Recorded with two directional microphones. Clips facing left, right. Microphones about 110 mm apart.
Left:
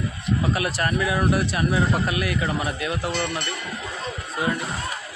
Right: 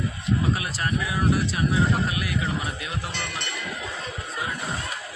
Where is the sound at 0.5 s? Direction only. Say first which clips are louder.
Left 4 dB; 65° left (ahead or behind).